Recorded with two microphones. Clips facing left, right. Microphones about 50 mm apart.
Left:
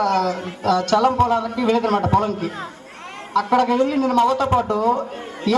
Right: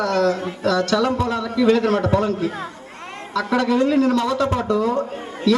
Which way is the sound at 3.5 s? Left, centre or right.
Left.